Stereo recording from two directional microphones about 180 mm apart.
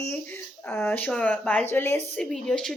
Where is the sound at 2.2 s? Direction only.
5° left (ahead or behind).